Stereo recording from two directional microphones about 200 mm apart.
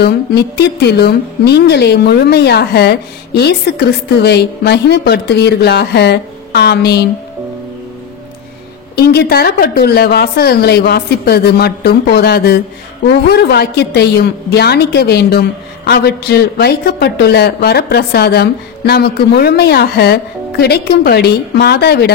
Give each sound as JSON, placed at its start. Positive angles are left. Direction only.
{"t": 0.0, "sound": "a woman's voice", "side_deg": 55}
{"t": 8.9, "sound": "a woman's voice", "side_deg": 50}